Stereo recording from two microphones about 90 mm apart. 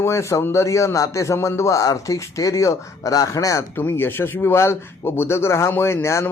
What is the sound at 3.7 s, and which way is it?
A man's voice, 25° left (ahead or behind).